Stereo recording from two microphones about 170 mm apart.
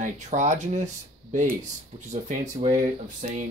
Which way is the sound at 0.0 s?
45° right (ahead or behind).